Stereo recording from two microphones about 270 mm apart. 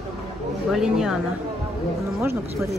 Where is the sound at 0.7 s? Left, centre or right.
Centre.